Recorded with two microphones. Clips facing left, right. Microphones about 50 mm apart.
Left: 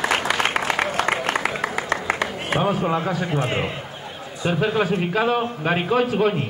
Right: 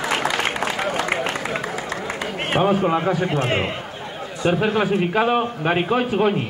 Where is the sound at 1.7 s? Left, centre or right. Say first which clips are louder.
Left 3 dB; left.